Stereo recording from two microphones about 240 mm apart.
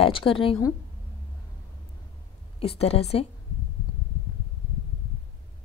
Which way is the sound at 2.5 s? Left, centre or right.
Left.